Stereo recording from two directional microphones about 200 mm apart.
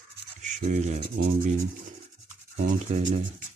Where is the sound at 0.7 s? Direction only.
35° right (ahead or behind).